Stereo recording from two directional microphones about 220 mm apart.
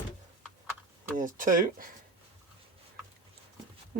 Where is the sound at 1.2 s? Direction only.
40° right (ahead or behind).